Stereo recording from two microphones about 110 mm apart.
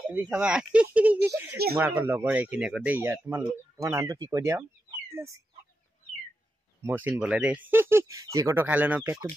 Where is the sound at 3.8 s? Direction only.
30° right (ahead or behind).